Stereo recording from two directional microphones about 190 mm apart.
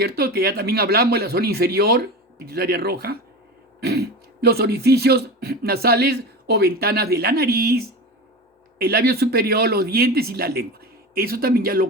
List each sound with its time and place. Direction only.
0.0 s speech: 55° right (ahead or behind)